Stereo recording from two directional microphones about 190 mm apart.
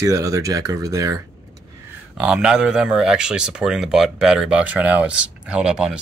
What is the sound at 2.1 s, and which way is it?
Speech, 5° right (ahead or behind).